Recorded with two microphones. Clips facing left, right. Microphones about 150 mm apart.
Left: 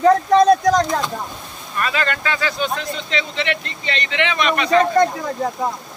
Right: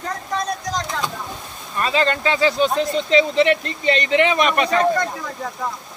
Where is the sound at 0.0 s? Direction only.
75° left (ahead or behind).